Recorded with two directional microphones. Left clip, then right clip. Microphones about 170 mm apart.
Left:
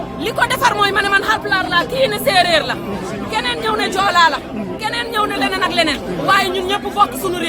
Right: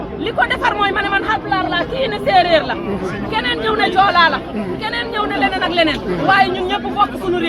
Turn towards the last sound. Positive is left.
turn(degrees=30)  # may be behind; listen again after turning